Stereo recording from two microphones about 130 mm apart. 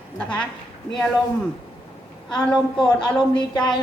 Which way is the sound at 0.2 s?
10° left (ahead or behind).